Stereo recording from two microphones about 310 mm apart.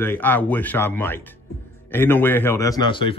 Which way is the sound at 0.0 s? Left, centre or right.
Centre.